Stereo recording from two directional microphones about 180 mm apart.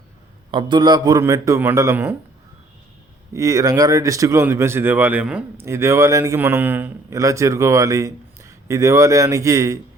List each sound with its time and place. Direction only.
0.5 s speech: 25° right (ahead or behind)
3.3 s speech: 20° right (ahead or behind)